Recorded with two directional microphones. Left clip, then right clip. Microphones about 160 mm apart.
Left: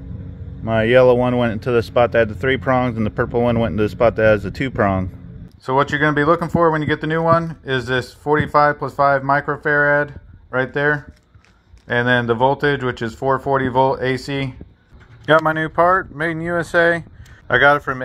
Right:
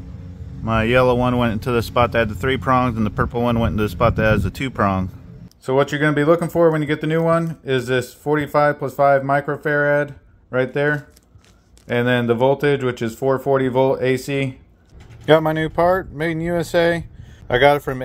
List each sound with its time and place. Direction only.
0.7 s speech: 15° left (ahead or behind)
5.7 s speech: 5° right (ahead or behind)